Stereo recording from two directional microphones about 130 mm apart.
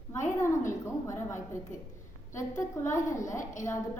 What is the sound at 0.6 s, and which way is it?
A woman's voice, 20° left (ahead or behind).